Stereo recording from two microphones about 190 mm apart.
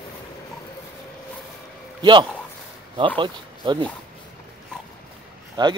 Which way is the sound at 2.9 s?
25° right (ahead or behind).